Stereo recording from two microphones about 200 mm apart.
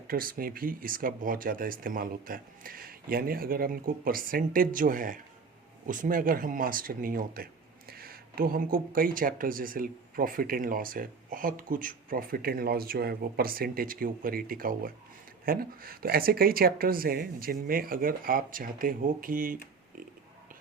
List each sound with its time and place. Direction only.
0.1 s speech: 45° right (ahead or behind)